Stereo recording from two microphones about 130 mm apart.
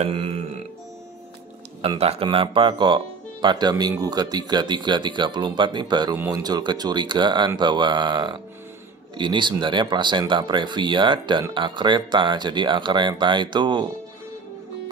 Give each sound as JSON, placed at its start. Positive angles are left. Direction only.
{"t": 0.0, "sound": "speech", "side_deg": -45}
{"t": 1.8, "sound": "speech", "side_deg": -50}